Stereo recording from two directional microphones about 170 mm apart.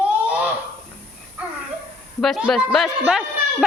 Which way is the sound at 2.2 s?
Centre (ahead or behind).